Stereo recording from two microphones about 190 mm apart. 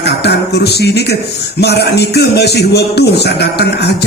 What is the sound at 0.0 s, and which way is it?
Music, 60° left (ahead or behind).